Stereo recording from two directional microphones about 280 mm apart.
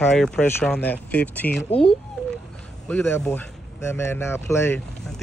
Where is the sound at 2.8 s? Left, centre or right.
Centre.